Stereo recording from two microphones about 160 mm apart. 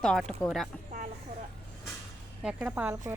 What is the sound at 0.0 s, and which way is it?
Speech, 5° left (ahead or behind).